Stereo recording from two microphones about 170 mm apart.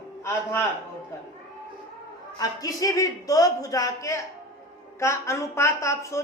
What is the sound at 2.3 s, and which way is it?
A woman's voice, 20° left (ahead or behind).